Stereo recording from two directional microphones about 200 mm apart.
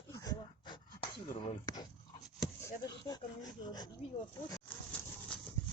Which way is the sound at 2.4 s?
20° left (ahead or behind).